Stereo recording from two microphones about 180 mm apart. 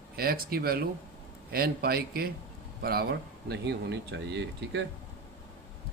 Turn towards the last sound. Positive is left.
turn(degrees=-80)